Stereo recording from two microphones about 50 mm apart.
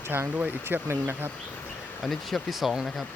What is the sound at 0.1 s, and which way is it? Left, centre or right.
Speech, right.